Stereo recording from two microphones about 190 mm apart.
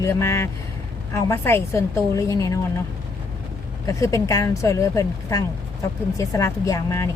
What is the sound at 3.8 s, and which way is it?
A woman's voice, 15° left (ahead or behind).